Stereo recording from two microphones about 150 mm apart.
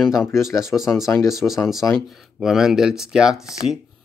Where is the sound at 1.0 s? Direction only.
20° left (ahead or behind).